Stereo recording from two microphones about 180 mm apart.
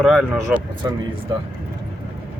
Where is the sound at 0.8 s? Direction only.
20° right (ahead or behind).